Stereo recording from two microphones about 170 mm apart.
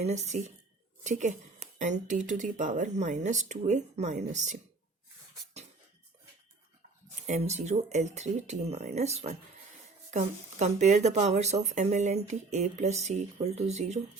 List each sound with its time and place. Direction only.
0.0 s speech: 40° right (ahead or behind)
7.3 s speech: 40° right (ahead or behind)